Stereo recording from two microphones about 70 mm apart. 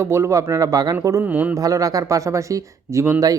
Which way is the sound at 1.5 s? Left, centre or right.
Right.